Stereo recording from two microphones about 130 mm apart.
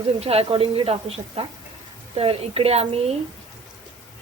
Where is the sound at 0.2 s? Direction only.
50° right (ahead or behind).